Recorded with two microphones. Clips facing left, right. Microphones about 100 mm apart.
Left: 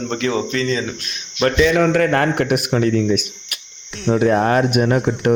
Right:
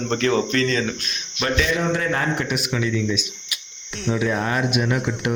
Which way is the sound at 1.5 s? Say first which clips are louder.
Left 7 dB; 60° left (ahead or behind).